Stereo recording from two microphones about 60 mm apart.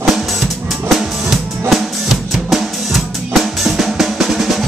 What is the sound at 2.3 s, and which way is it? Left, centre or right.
Drum kit, centre.